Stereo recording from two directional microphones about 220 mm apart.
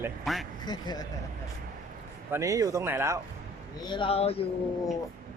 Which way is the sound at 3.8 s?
20° left (ahead or behind).